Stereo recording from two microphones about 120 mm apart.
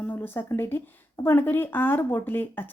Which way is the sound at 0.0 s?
15° left (ahead or behind).